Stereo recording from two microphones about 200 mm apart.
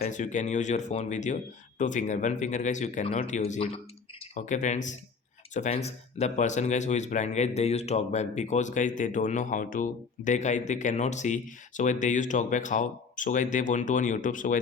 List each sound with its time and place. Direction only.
0.0 s a man's voice: 35° left (ahead or behind)